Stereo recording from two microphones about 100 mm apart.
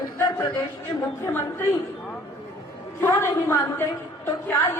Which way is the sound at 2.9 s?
25° left (ahead or behind).